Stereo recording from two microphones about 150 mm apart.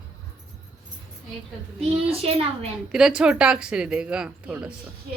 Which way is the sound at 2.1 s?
40° right (ahead or behind).